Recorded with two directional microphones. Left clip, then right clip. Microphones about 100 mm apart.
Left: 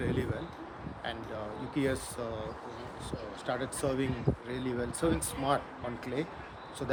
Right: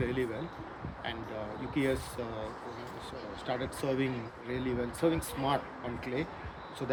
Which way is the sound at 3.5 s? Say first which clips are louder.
Left 1 dB; 65° left (ahead or behind).